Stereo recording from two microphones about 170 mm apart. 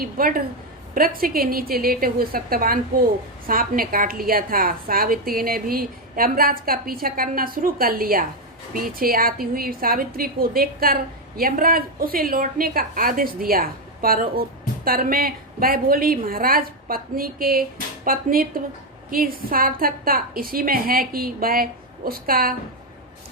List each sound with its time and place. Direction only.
0.0 s a woman's voice: 55° right (ahead or behind)